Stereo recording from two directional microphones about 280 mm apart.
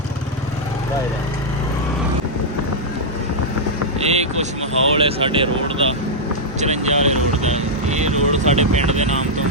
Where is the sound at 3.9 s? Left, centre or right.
Right.